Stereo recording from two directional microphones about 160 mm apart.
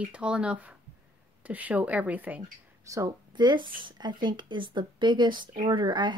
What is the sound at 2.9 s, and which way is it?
Speech, 25° right (ahead or behind).